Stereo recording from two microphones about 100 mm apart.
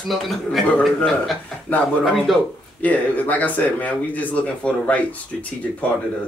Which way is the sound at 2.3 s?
Centre (ahead or behind).